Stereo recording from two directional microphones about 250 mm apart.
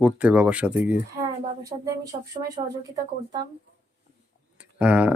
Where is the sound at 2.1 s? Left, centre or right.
Right.